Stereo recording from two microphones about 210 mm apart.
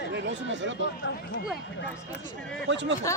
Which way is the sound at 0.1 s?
60° right (ahead or behind).